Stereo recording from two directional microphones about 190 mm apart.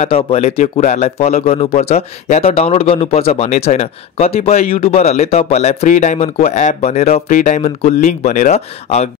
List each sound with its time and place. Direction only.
0.0 s a man's voice: 30° left (ahead or behind)